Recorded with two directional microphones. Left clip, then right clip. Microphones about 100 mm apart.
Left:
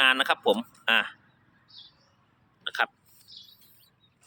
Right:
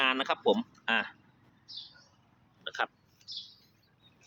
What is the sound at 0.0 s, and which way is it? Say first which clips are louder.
Speech: left 6 dB; 10° left (ahead or behind).